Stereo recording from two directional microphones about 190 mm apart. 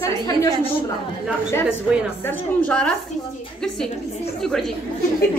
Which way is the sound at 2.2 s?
10° left (ahead or behind).